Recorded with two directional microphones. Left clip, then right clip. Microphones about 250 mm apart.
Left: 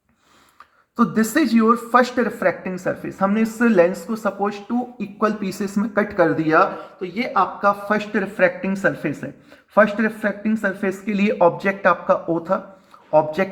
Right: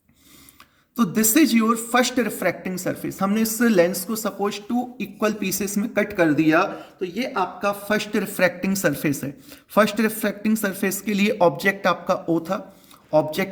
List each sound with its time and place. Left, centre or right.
0.9 s speech: right